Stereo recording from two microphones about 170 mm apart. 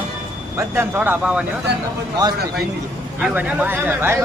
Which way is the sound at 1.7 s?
80° right.